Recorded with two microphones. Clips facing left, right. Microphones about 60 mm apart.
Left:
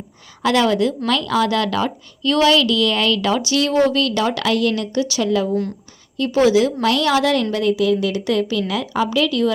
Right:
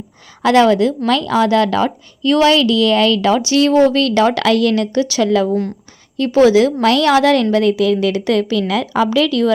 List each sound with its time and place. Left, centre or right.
0.4 s a woman's voice: right
5.2 s a woman's voice: right
6.1 s a woman's voice: right
7.5 s a woman's voice: right